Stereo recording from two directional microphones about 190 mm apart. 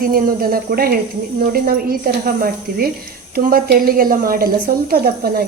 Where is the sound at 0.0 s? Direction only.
50° right (ahead or behind).